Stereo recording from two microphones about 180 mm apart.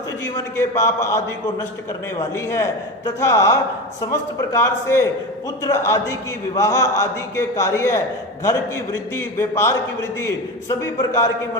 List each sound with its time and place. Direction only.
0.5 s a man's voice: 15° left (ahead or behind)
2.3 s a man's voice: 15° left (ahead or behind)